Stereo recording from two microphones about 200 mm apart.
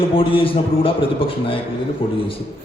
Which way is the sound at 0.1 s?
25° left (ahead or behind).